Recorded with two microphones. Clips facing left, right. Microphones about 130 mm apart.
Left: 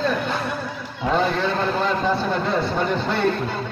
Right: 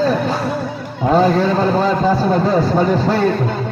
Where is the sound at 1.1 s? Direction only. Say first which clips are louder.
Right 7 dB; 40° right (ahead or behind).